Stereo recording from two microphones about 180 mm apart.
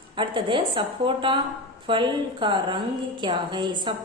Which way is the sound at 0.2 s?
25° right (ahead or behind).